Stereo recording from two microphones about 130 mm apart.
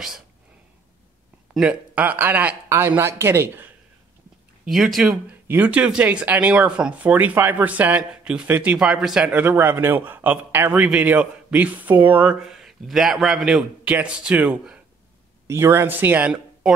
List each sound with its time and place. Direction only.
1.5 s speech: 10° right (ahead or behind)
4.6 s speech: centre (ahead or behind)